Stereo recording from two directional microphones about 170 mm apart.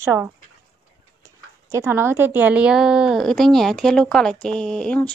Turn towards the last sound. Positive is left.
turn(degrees=5)  # may be behind; listen again after turning